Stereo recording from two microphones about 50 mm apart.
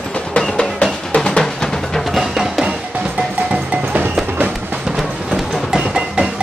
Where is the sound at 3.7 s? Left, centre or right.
Right.